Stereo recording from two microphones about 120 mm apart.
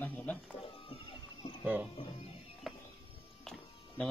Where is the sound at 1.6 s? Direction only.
15° right (ahead or behind).